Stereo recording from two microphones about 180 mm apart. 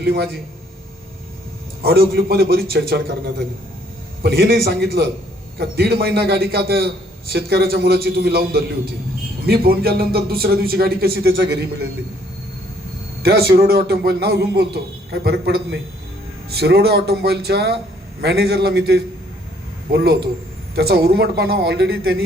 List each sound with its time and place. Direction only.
0.0 s a man's voice: 60° right (ahead or behind)
1.8 s a man's voice: 55° right (ahead or behind)
13.2 s a man's voice: 60° right (ahead or behind)